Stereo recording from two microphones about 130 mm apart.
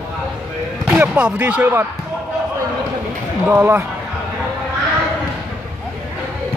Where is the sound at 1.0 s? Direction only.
10° right (ahead or behind).